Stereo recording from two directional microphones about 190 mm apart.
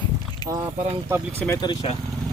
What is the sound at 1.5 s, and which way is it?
Speech, 25° left (ahead or behind).